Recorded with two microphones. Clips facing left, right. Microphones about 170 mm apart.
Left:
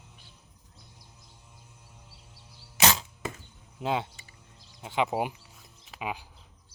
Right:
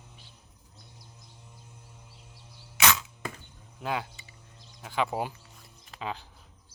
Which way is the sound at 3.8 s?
25° left (ahead or behind).